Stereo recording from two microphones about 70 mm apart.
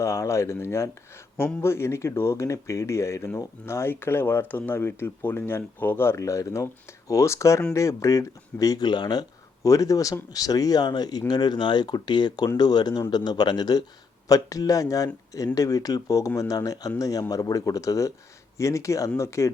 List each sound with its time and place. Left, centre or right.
0.0 s speech: left
8.8 s speech: left
9.6 s speech: left
14.3 s speech: left